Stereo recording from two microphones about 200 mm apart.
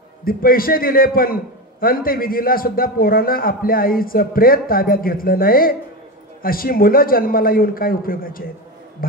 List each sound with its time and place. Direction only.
0.2 s a man's voice: 45° left (ahead or behind)